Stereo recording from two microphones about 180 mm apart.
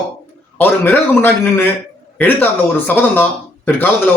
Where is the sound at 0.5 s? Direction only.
10° left (ahead or behind).